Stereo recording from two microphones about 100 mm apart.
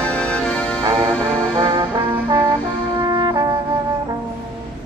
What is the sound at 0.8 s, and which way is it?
Music, 40° right (ahead or behind).